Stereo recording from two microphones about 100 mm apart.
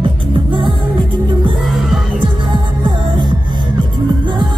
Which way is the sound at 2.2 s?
55° right (ahead or behind).